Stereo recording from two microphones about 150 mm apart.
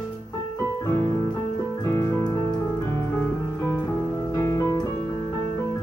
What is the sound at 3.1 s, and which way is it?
Music, 15° left (ahead or behind).